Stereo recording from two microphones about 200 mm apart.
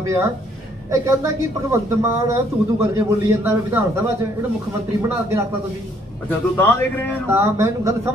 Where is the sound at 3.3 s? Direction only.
10° right (ahead or behind).